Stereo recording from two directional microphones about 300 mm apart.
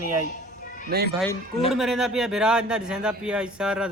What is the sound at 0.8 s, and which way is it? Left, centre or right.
Speech, right.